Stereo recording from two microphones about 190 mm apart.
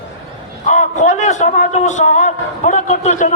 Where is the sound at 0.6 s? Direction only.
40° left (ahead or behind).